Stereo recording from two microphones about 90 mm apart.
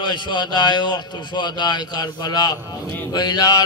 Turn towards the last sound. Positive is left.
turn(degrees=50)  # may be behind; listen again after turning